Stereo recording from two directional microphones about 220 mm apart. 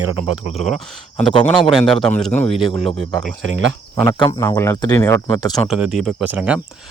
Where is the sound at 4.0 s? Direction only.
20° left (ahead or behind).